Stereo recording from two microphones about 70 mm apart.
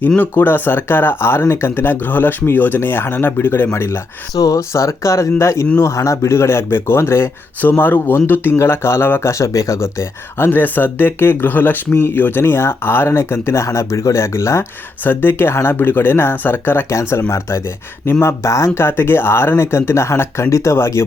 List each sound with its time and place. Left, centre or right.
0.2 s speech: left
4.4 s speech: left
4.7 s speech: left
7.6 s a man's voice: left
9.3 s speech: left
15.0 s speech: left